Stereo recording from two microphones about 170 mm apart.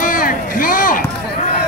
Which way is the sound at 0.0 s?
55° left (ahead or behind).